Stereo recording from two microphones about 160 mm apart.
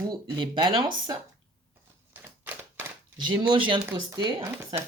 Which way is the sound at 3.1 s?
30° right (ahead or behind).